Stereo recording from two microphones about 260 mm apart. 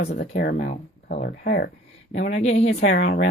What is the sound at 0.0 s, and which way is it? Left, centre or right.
Speech, left.